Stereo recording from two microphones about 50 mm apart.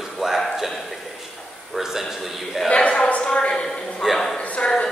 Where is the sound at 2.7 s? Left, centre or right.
Left.